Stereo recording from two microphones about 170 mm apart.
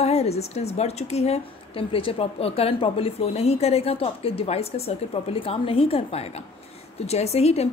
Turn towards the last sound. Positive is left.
turn(degrees=40)  # may be behind; listen again after turning